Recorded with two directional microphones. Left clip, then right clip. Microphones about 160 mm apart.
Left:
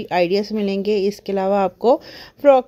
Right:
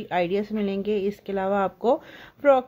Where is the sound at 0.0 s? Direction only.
45° left (ahead or behind).